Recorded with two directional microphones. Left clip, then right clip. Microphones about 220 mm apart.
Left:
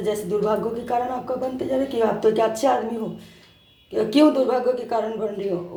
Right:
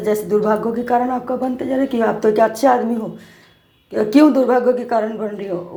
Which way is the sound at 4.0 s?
30° right (ahead or behind).